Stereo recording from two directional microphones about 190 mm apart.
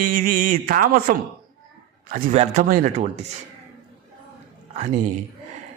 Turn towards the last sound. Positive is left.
turn(degrees=-40)  # may be behind; listen again after turning